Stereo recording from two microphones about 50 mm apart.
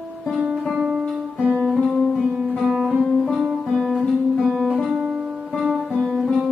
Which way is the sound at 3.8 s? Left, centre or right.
Centre.